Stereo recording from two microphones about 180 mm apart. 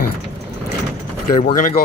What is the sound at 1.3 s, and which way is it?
Speech, 50° left (ahead or behind).